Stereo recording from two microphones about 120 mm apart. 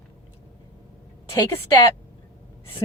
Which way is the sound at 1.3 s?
25° left (ahead or behind).